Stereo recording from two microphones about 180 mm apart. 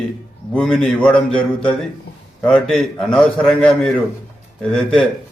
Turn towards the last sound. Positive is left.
turn(degrees=0)  # may be behind; listen again after turning